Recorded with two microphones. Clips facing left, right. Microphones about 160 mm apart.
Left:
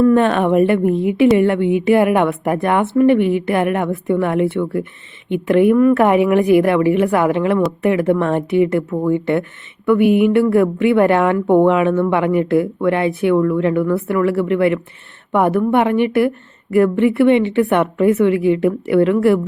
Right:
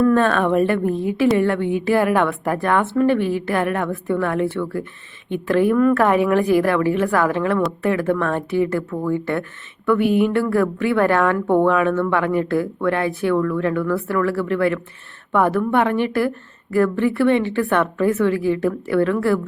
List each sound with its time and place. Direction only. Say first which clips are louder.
0.0 s a woman's voice: left 3 dB; 20° left (ahead or behind)
10.2 s a woman's voice: left 5 dB; 15° left (ahead or behind)